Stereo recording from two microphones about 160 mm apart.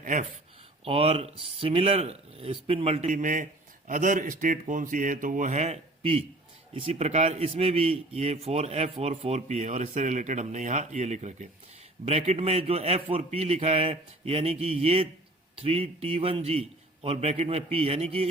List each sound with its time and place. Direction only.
0.0 s speech: 50° right (ahead or behind)
0.9 s a man's voice: 35° right (ahead or behind)
3.1 s a man's voice: 55° right (ahead or behind); by 18.3 s 40° right (ahead or behind)